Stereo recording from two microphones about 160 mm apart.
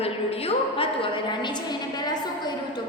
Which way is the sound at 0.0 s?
40° left (ahead or behind).